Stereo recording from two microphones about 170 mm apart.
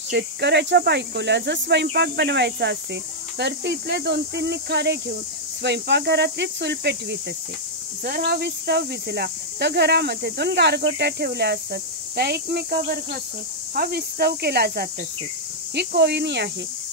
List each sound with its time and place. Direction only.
0.1 s speech: 90° right
8.0 s speech: 65° right (ahead or behind); by 16.4 s 85° right